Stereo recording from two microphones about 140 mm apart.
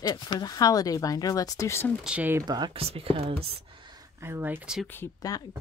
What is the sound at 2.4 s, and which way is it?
Speech, 30° right (ahead or behind).